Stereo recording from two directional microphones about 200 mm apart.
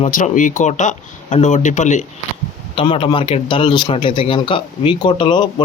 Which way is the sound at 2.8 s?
25° left (ahead or behind).